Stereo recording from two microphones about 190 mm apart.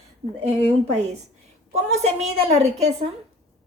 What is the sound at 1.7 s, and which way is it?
Speech, 35° right (ahead or behind).